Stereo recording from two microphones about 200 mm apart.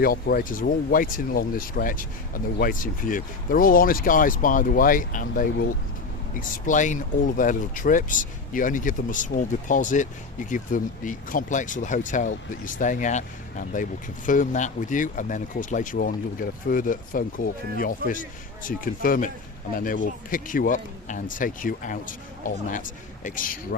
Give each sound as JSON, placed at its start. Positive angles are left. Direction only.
{"t": 0.0, "sound": "speech", "side_deg": 45}